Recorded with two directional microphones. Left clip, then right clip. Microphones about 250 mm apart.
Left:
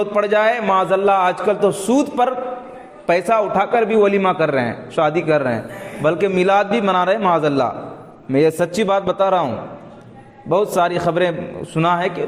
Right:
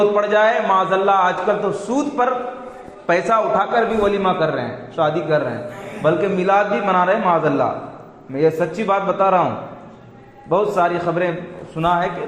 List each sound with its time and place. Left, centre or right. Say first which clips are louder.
0.2 s a man's voice: even; left
10.5 s a man's voice: even; left